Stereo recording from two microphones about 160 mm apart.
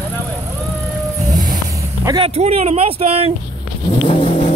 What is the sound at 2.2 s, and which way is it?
Speech, 40° right (ahead or behind).